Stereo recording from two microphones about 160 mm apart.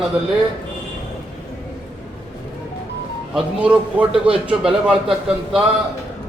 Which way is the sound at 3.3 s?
10° right (ahead or behind).